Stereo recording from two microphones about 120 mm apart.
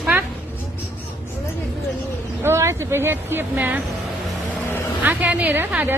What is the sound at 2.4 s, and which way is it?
A woman's voice, 20° right (ahead or behind).